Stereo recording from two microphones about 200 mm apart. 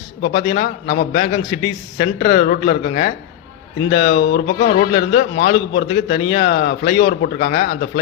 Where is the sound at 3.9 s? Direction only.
55° left (ahead or behind).